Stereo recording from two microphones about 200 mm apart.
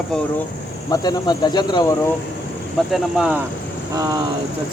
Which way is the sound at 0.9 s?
20° left (ahead or behind).